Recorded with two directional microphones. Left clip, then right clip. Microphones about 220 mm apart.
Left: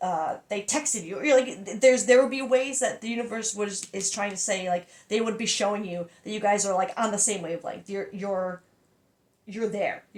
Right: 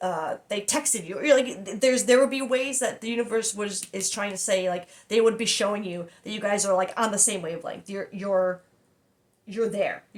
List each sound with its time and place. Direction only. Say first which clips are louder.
0.0 s speech: left 1 dB; 25° right (ahead or behind)